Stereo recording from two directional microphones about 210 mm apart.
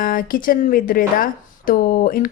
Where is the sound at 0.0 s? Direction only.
40° left (ahead or behind).